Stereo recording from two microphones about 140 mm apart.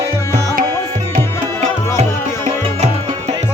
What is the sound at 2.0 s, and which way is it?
Music, 55° right (ahead or behind).